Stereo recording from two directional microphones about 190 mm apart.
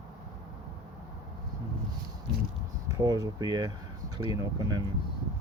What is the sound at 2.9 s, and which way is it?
Speech, 20° right (ahead or behind).